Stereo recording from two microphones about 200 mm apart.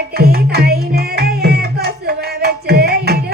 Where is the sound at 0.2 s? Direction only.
50° right (ahead or behind).